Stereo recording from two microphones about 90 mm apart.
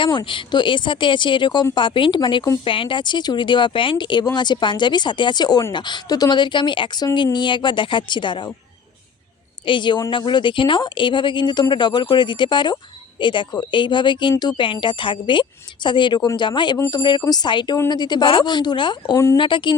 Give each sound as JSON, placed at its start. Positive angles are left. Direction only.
{"t": 0.0, "sound": "speech", "side_deg": 60}
{"t": 2.6, "sound": "speech", "side_deg": 75}
{"t": 9.6, "sound": "speech", "side_deg": 60}
{"t": 19.1, "sound": "speech", "side_deg": 30}
{"t": 19.4, "sound": "speech", "side_deg": 65}